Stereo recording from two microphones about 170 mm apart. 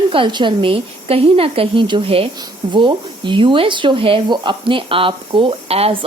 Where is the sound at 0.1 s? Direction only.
30° right (ahead or behind).